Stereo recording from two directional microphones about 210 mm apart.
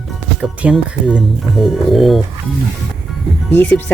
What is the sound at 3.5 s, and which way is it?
Speech, 10° left (ahead or behind).